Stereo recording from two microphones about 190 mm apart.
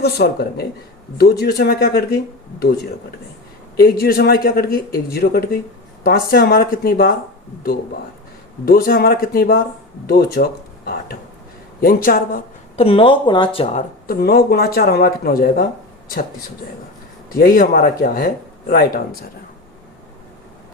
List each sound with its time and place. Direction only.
0.0 s speech: 55° left (ahead or behind)
3.8 s speech: 55° left (ahead or behind)
8.6 s speech: 50° left (ahead or behind)
12.7 s speech: 30° left (ahead or behind)
14.2 s speech: 55° left (ahead or behind)
17.3 s speech: 50° left (ahead or behind)